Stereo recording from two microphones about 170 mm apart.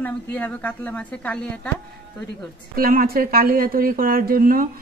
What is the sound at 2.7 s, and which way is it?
A woman's voice, 60° right (ahead or behind).